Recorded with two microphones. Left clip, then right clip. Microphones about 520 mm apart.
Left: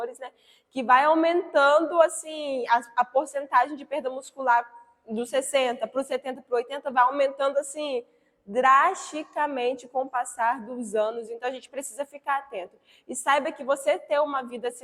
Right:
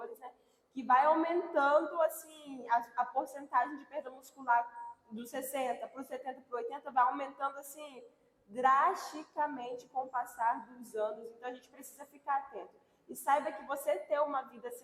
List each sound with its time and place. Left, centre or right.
0.7 s a woman's voice: left
13.2 s a woman's voice: left